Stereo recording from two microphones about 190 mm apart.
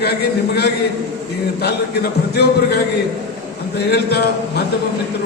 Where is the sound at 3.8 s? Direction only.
60° left (ahead or behind).